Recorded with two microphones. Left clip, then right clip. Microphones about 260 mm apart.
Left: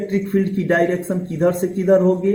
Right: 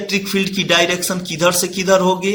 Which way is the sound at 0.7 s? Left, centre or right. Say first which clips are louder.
Right 3 dB; centre.